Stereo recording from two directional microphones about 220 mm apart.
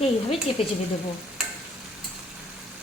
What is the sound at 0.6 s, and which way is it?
Speech, 25° left (ahead or behind).